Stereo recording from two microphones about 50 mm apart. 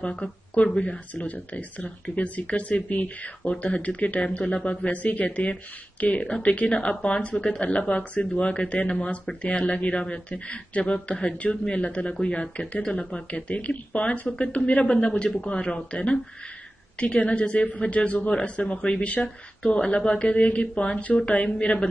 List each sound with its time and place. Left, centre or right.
0.0 s a woman's voice: left